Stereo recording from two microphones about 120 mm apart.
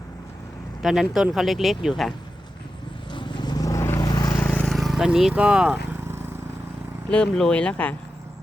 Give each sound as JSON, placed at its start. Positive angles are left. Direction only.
{"t": 0.8, "sound": "speech", "side_deg": -5}
{"t": 3.1, "sound": "vehicle", "side_deg": 40}
{"t": 4.4, "sound": "vehicle", "side_deg": 15}
{"t": 4.6, "sound": "speech", "side_deg": 0}
{"t": 7.1, "sound": "speech", "side_deg": 5}